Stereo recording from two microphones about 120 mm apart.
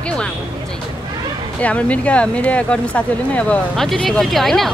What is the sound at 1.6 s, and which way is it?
Speech, 10° left (ahead or behind).